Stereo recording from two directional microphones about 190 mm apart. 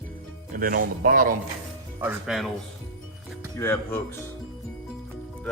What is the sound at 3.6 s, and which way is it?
Speech, 15° left (ahead or behind).